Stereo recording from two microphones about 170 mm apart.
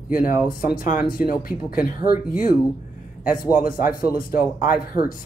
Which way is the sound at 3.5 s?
55° left (ahead or behind).